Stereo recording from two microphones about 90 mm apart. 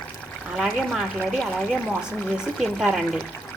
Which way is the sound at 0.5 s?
Centre (ahead or behind).